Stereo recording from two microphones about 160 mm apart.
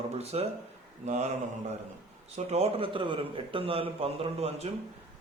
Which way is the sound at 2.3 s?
40° right (ahead or behind).